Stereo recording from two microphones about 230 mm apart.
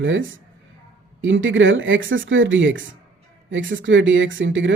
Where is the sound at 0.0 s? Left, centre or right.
Right.